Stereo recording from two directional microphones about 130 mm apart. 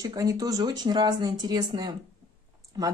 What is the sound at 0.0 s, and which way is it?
Speech, 25° right (ahead or behind).